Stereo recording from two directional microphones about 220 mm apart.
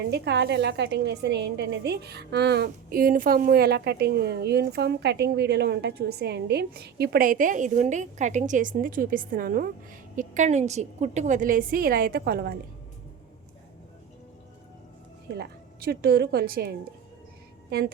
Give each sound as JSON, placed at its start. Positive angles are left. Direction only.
{"t": 0.1, "sound": "a woman's voice", "side_deg": -50}
{"t": 15.4, "sound": "a woman's voice", "side_deg": -45}